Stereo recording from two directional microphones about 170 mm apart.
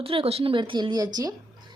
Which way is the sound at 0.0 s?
35° right (ahead or behind).